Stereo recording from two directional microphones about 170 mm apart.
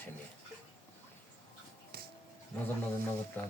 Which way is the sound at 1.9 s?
65° right (ahead or behind).